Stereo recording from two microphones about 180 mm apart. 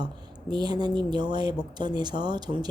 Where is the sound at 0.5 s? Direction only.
25° right (ahead or behind).